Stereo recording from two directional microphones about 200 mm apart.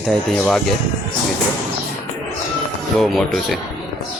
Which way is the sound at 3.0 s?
Centre (ahead or behind).